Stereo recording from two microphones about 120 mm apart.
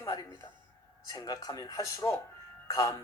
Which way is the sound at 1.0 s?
30° left (ahead or behind).